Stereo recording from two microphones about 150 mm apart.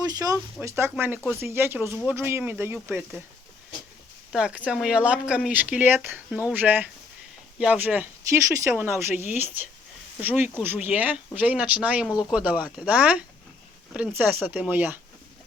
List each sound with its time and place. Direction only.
0.0 s speech: 25° right (ahead or behind)
4.3 s speech: 5° right (ahead or behind)